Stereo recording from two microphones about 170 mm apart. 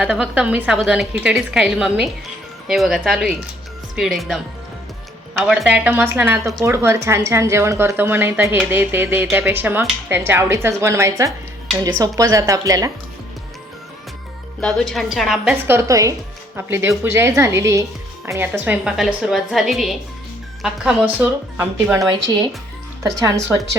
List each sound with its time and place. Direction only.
0.0 s a woman's voice: 10° right (ahead or behind)
5.4 s a woman's voice: 5° right (ahead or behind); by 12.9 s 20° right (ahead or behind)
14.6 s a woman's voice: centre (ahead or behind)
15.5 s a woman's voice: 15° right (ahead or behind)